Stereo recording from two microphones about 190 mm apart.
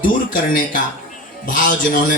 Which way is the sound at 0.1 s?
45° left (ahead or behind).